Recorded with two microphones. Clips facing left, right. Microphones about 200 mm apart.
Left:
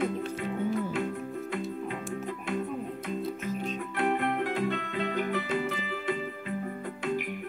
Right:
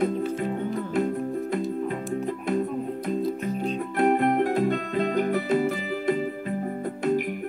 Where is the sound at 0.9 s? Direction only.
40° right (ahead or behind).